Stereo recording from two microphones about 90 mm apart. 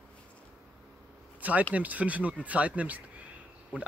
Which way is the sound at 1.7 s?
15° right (ahead or behind).